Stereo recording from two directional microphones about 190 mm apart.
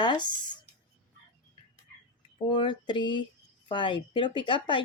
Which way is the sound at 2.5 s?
25° left (ahead or behind).